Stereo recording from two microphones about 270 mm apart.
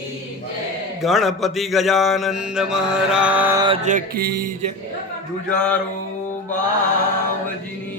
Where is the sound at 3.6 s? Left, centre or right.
Right.